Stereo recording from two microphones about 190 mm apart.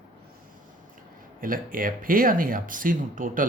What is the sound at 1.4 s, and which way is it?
Speech, 45° right (ahead or behind).